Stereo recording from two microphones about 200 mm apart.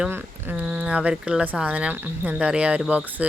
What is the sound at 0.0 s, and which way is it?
Speech, 10° right (ahead or behind).